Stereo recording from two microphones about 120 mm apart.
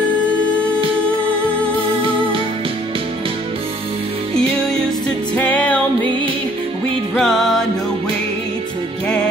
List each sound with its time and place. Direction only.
2.0 s music: 45° right (ahead or behind)
5.3 s music: 10° left (ahead or behind)
7.2 s music: centre (ahead or behind)